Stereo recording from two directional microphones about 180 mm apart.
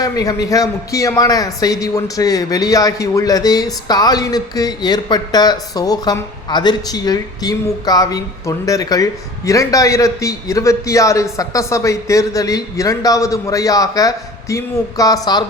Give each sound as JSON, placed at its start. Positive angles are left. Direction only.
{"t": 0.0, "sound": "a man's voice", "side_deg": 20}